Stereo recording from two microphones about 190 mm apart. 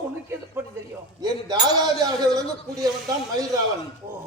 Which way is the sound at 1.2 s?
20° right (ahead or behind).